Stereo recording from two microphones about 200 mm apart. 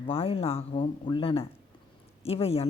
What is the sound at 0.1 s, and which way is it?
A man's voice, 30° left (ahead or behind).